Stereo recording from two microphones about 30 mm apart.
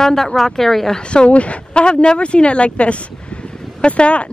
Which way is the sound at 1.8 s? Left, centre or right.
Left.